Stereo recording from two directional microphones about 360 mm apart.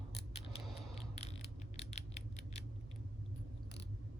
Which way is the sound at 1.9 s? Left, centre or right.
Centre.